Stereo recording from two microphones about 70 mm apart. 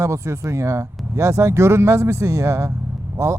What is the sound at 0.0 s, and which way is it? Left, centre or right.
Speech, right.